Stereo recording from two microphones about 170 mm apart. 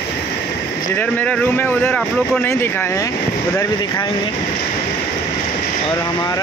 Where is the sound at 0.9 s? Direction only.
10° left (ahead or behind).